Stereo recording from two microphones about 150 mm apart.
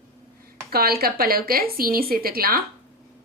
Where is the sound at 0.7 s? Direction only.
90° right.